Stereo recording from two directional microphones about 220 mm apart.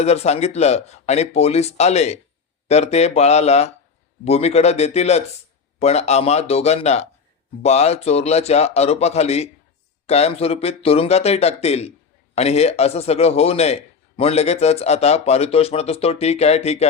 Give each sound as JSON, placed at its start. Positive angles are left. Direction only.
{"t": 0.0, "sound": "speech", "side_deg": 30}